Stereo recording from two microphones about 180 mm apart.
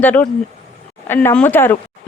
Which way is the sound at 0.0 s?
10° left (ahead or behind).